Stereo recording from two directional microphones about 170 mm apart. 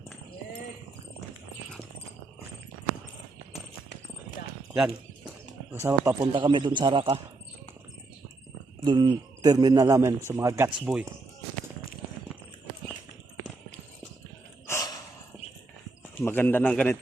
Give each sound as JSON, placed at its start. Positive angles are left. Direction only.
{"t": 5.8, "sound": "speech", "side_deg": -15}
{"t": 6.3, "sound": "a man's voice", "side_deg": -30}
{"t": 8.8, "sound": "a man's voice", "side_deg": -25}
{"t": 10.9, "sound": "speech", "side_deg": -5}
{"t": 14.7, "sound": "sigh", "side_deg": 20}
{"t": 16.1, "sound": "a man's voice", "side_deg": 10}